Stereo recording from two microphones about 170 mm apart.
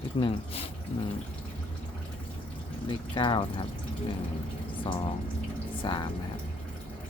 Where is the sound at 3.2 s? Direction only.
30° left (ahead or behind).